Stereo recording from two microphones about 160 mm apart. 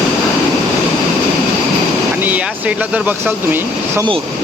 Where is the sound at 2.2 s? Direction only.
10° right (ahead or behind).